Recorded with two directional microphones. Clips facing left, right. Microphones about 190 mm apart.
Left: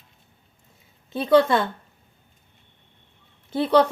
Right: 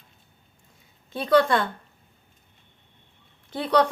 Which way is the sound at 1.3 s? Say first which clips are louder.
Left 2 dB; 25° left (ahead or behind).